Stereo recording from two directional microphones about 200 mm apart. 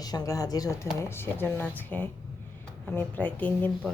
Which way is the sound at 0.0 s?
20° left (ahead or behind).